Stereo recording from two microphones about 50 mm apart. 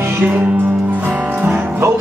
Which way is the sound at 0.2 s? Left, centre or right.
Right.